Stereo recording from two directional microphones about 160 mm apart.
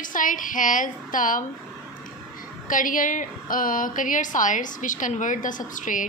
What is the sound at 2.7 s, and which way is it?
A woman's voice, 55° left (ahead or behind).